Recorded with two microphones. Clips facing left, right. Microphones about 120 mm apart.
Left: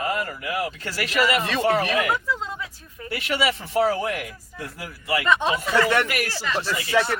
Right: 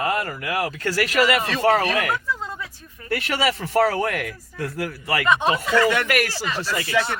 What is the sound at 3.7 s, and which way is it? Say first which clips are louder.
Speech: right 2 dB; 70° right (ahead or behind).